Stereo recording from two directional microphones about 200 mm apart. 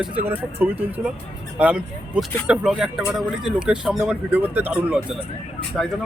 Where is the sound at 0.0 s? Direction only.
10° right (ahead or behind).